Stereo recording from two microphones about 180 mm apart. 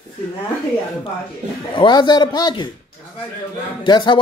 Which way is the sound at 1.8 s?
25° left (ahead or behind).